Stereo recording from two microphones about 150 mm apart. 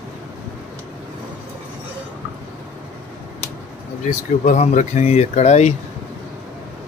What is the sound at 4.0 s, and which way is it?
Speech, 55° left (ahead or behind).